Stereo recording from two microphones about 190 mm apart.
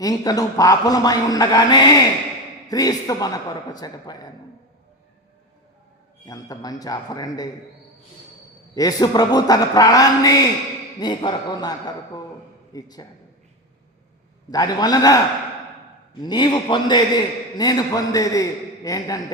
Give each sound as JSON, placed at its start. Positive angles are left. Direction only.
{"t": 0.0, "sound": "a man's voice", "side_deg": 20}
{"t": 6.2, "sound": "a man's voice", "side_deg": 20}
{"t": 8.7, "sound": "a man's voice", "side_deg": 20}
{"t": 14.5, "sound": "a man's voice", "side_deg": 20}
{"t": 16.2, "sound": "a man's voice", "side_deg": 20}